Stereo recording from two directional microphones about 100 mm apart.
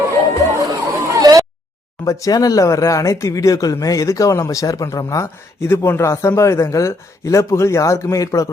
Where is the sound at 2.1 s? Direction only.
35° left (ahead or behind).